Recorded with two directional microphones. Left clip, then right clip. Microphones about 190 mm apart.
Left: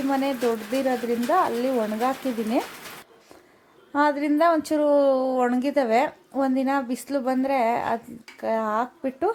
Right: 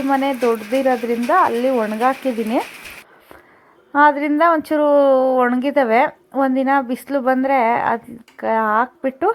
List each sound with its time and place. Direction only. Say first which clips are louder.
0.1 s a woman's voice: right 8 dB; 15° right (ahead or behind)
3.9 s a woman's voice: right 8 dB; 15° right (ahead or behind)